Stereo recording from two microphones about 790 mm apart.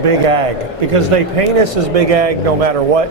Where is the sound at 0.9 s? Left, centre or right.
Right.